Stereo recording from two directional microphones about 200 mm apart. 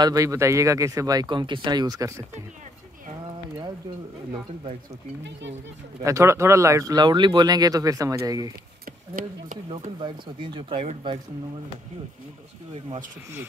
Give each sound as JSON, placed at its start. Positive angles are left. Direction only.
{"t": 0.0, "sound": "speech", "side_deg": -15}
{"t": 6.0, "sound": "speech", "side_deg": -15}
{"t": 9.2, "sound": "speech", "side_deg": -45}
{"t": 10.0, "sound": "speech", "side_deg": -25}